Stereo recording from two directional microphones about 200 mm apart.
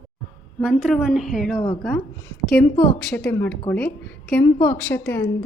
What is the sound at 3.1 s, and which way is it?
A woman's voice, 5° left (ahead or behind).